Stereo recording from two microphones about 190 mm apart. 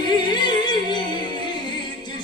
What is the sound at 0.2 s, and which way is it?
Music, 25° left (ahead or behind).